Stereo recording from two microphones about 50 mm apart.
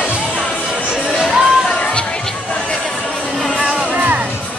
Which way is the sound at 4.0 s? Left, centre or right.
Right.